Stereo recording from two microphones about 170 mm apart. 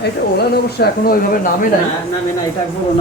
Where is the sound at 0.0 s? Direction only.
70° left (ahead or behind).